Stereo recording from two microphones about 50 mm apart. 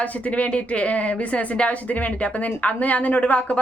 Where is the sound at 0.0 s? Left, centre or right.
Left.